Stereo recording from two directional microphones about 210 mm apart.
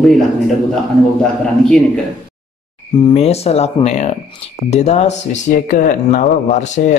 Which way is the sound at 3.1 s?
30° left (ahead or behind).